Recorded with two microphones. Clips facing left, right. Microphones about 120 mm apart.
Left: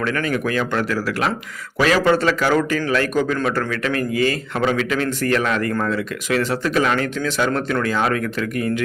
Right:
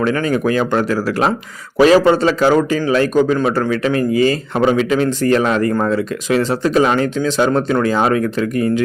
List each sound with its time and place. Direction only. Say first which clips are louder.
0.0 s a man's voice: right 5 dB; 25° right (ahead or behind)